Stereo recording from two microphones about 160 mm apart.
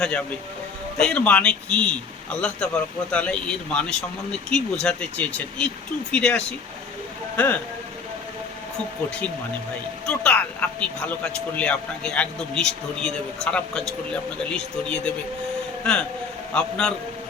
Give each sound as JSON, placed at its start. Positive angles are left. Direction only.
{"t": 0.0, "sound": "speech", "side_deg": 5}
{"t": 10.1, "sound": "speech", "side_deg": 5}
{"t": 16.6, "sound": "speech", "side_deg": 5}